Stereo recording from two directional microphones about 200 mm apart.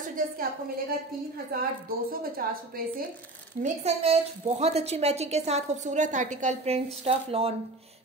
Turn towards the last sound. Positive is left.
turn(degrees=-30)  # may be behind; listen again after turning